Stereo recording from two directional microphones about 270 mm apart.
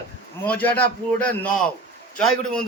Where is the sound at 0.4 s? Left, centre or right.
Centre.